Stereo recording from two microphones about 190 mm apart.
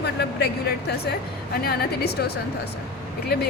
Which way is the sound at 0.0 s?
60° left (ahead or behind).